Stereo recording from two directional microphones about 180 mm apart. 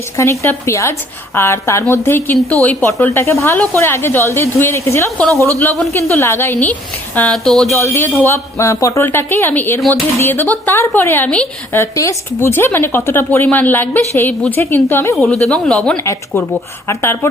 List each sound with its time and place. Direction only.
0.2 s speech: 15° left (ahead or behind)
5.3 s speech: 15° right (ahead or behind)
5.9 s speech: 15° left (ahead or behind)
7.2 s speech: 5° left (ahead or behind)
7.7 s speech: 15° left (ahead or behind)
15.1 s speech: centre (ahead or behind)